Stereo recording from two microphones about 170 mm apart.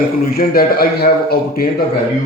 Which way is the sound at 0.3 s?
60° left (ahead or behind).